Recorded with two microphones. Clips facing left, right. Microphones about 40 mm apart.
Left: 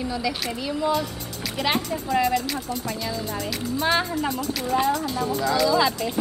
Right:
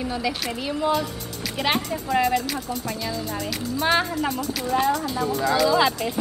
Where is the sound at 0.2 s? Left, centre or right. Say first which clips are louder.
Even; centre.